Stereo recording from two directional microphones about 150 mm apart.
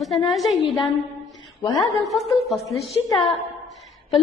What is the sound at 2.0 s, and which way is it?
Speech, centre (ahead or behind).